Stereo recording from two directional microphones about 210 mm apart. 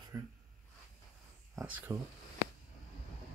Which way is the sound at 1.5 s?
5° right (ahead or behind).